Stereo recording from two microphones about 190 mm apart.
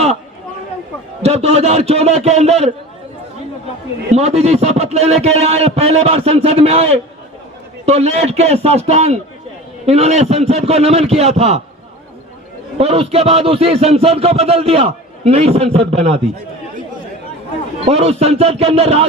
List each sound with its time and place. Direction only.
1.2 s speech: 35° right (ahead or behind)
4.1 s speech: 35° right (ahead or behind)
12.8 s speech: 30° right (ahead or behind)
17.8 s speech: 35° right (ahead or behind)